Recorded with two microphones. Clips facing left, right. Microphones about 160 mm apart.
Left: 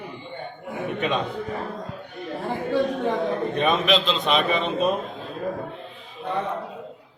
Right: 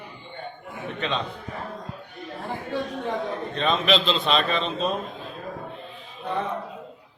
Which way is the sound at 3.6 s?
10° left (ahead or behind).